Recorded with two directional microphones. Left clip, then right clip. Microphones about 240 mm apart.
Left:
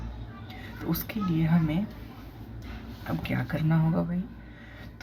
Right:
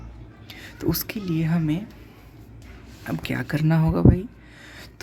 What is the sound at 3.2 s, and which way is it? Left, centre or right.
Speech, right.